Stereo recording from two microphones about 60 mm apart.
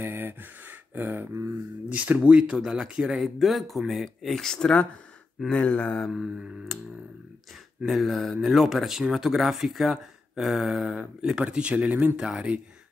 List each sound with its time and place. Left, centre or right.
0.0 s a sound: right
1.9 s speech: right
3.3 s speech: centre
5.5 s a sound: centre
6.1 s speech: centre
6.7 s speech: centre
11.0 s speech: centre